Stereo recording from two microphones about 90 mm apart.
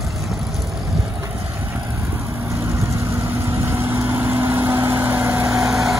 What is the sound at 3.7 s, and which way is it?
Vehicle, 25° right (ahead or behind).